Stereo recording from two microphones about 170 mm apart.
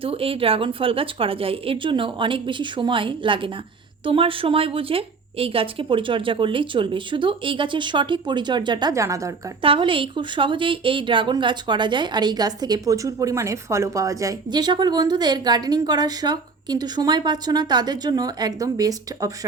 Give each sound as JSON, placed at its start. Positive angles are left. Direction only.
{"t": 0.0, "sound": "a woman's voice", "side_deg": -35}
{"t": 9.6, "sound": "a woman's voice", "side_deg": -30}